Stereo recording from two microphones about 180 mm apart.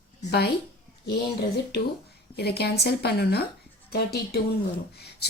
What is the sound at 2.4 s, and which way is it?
A woman's voice, 65° left (ahead or behind).